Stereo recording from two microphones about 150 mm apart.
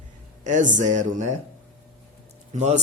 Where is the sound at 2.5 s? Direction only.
50° right (ahead or behind).